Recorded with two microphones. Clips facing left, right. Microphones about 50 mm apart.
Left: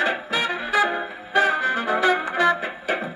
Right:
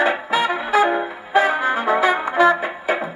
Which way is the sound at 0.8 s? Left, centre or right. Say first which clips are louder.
Right 5 dB; centre.